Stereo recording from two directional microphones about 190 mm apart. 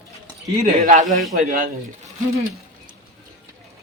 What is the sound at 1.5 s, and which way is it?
Speech, 50° right (ahead or behind).